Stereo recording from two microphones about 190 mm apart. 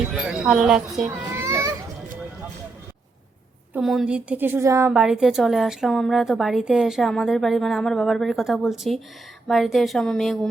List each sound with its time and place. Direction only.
0.1 s a woman's voice: 5° right (ahead or behind)
1.3 s children playing: 15° right (ahead or behind)
3.8 s a woman's voice: centre (ahead or behind)